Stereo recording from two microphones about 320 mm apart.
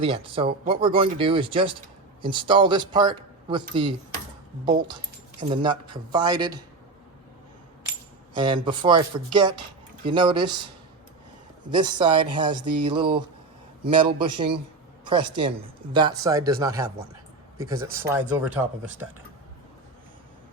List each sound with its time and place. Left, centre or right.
0.0 s speech: centre
4.6 s speech: centre
8.4 s speech: centre
11.7 s speech: centre